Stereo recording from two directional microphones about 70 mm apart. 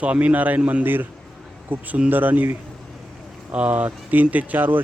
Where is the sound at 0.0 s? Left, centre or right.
Centre.